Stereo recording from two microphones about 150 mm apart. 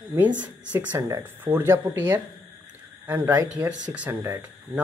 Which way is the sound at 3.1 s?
15° right (ahead or behind).